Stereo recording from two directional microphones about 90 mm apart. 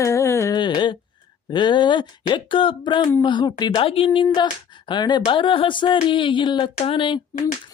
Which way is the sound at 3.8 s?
90° left.